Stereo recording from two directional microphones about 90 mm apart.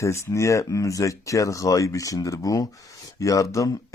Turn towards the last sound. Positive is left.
turn(degrees=35)  # may be behind; listen again after turning